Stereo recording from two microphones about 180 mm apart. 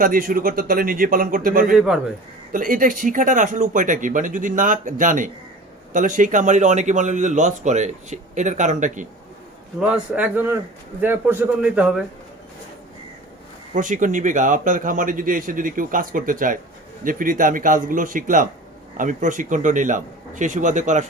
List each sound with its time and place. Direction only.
0.0 s speech: 50° right (ahead or behind)
9.8 s a man's voice: 5° right (ahead or behind)
13.7 s speech: 45° right (ahead or behind)